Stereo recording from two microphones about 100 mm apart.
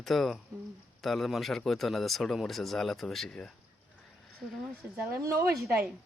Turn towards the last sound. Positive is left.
turn(degrees=-25)  # may be behind; listen again after turning